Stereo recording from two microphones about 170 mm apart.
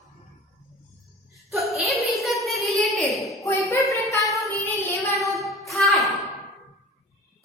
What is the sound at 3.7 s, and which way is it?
Child singing, 15° left (ahead or behind).